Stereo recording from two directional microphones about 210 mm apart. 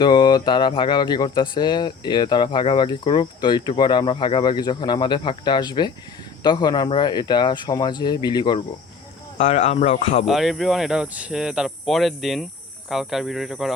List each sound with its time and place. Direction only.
0.0 s speech: 20° left (ahead or behind)
9.4 s speech: 30° left (ahead or behind)
10.2 s speech: centre (ahead or behind)